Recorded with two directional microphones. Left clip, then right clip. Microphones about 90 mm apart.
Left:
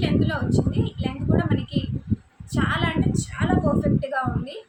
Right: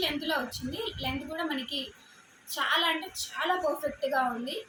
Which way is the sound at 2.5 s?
15° left (ahead or behind).